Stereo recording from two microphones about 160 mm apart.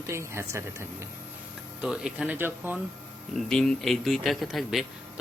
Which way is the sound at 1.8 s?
5° right (ahead or behind).